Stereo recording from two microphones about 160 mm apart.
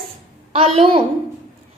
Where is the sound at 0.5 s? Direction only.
40° right (ahead or behind).